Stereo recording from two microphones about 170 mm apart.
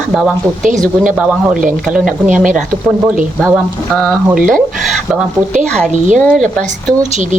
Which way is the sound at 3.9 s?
5° left (ahead or behind).